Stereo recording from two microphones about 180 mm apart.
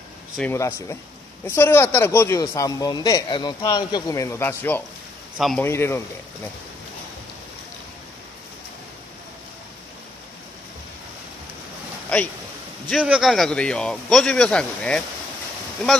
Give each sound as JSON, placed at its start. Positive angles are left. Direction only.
{"t": 0.4, "sound": "a man's voice", "side_deg": 15}
{"t": 12.1, "sound": "a man's voice", "side_deg": 5}